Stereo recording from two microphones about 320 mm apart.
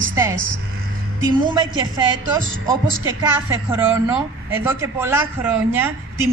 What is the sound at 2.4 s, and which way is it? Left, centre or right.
Speech, right.